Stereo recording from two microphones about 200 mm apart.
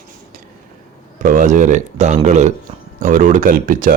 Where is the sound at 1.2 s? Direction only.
40° right (ahead or behind).